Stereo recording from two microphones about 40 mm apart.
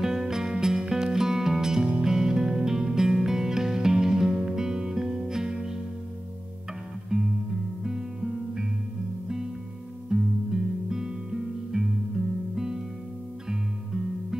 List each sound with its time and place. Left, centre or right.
0.0 s music: centre
7.1 s music: centre
10.0 s music: centre